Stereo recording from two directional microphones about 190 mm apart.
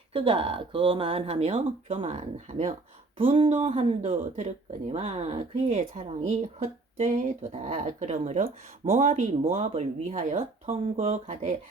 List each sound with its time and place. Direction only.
0.1 s speech: 30° right (ahead or behind)